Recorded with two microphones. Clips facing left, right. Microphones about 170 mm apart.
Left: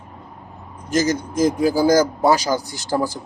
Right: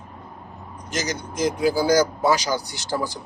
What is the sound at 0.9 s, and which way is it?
Speech, 45° left (ahead or behind).